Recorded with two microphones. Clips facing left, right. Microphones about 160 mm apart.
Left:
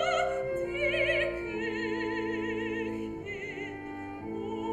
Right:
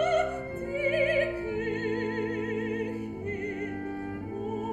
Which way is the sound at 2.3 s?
35° right (ahead or behind).